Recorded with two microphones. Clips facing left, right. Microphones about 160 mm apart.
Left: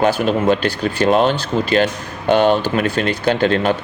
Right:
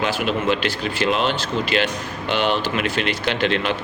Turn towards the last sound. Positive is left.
turn(degrees=40)  # may be behind; listen again after turning